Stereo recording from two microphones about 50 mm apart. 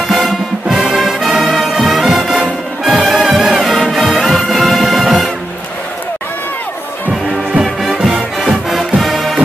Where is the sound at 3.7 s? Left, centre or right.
Centre.